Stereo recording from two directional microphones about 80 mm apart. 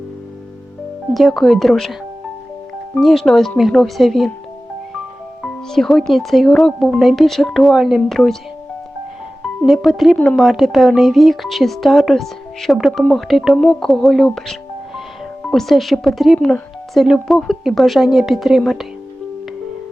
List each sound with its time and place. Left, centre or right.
1.1 s speech: centre
3.0 s speech: centre
5.4 s speech: centre
9.6 s speech: centre